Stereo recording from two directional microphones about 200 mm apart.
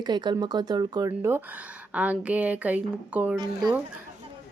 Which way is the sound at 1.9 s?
5° right (ahead or behind).